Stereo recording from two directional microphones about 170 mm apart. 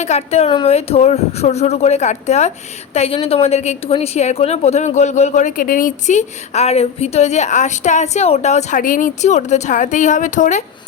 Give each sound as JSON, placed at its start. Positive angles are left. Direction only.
{"t": 0.0, "sound": "a woman's voice", "side_deg": 40}